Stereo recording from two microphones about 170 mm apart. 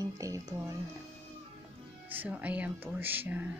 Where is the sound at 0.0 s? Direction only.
20° right (ahead or behind).